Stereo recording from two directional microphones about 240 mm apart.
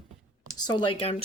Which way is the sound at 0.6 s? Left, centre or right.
Centre.